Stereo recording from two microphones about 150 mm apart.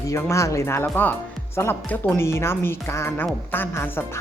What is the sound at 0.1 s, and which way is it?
Speech, 20° left (ahead or behind).